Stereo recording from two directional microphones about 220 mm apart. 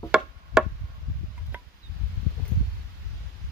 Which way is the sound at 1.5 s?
5° right (ahead or behind).